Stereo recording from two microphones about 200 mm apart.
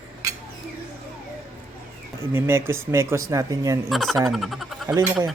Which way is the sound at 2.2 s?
10° right (ahead or behind).